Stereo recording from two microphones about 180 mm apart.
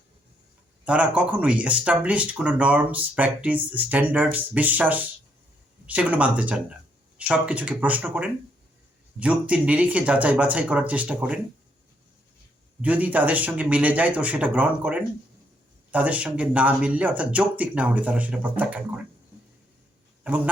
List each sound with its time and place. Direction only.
0.9 s speech: 5° right (ahead or behind)
12.8 s speech: 10° right (ahead or behind)
20.2 s speech: 5° right (ahead or behind)